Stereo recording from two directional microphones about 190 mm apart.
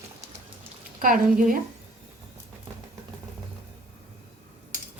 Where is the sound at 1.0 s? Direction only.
45° right (ahead or behind).